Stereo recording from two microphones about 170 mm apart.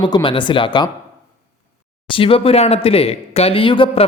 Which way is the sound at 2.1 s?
30° left (ahead or behind).